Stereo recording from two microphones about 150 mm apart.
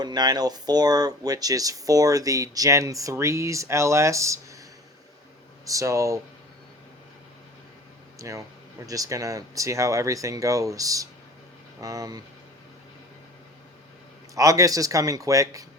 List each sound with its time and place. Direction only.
0.0 s speech: 25° right (ahead or behind)
5.6 s speech: 20° right (ahead or behind)
8.2 s speech: 20° right (ahead or behind)
14.3 s speech: 20° right (ahead or behind)